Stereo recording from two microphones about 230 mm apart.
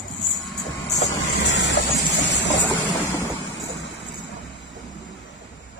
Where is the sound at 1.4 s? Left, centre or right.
Left.